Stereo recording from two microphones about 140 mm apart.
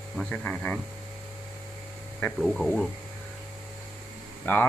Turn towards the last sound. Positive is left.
turn(degrees=15)  # may be behind; listen again after turning